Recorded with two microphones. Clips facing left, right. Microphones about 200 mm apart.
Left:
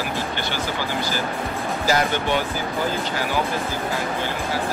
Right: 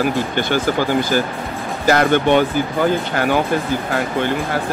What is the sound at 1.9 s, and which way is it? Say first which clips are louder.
Speech: right 8 dB; 60° right (ahead or behind).